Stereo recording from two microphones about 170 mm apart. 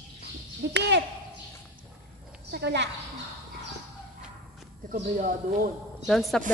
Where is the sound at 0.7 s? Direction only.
85° right.